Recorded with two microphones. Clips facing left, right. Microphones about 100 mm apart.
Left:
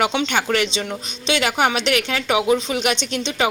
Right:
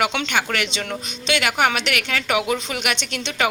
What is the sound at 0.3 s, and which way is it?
A woman's voice, 30° left (ahead or behind).